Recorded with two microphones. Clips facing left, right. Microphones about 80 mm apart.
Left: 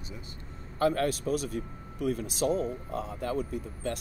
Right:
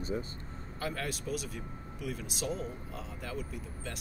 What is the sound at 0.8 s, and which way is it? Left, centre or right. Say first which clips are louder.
Speech: left 10 dB; left.